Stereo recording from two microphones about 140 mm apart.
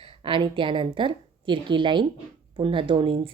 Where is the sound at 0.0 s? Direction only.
40° right (ahead or behind).